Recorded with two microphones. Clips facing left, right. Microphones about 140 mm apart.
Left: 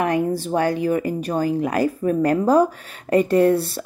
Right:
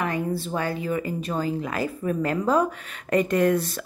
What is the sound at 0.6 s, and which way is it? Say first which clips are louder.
Speech: left 9 dB; 55° left (ahead or behind).